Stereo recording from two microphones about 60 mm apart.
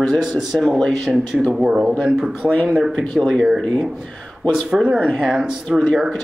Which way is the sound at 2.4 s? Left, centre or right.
Centre.